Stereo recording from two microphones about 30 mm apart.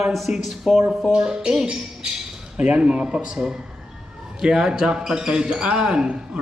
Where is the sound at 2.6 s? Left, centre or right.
Right.